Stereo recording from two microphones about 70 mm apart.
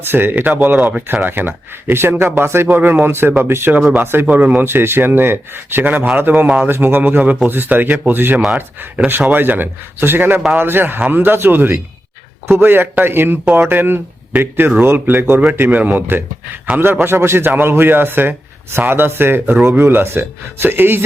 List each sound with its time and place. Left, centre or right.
0.0 s speech: right
4.3 s speech: right